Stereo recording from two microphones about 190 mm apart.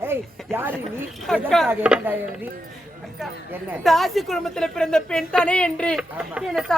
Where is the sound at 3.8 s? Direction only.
Centre (ahead or behind).